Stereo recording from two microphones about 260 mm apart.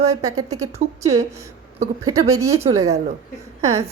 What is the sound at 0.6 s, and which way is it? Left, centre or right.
A woman's voice, centre.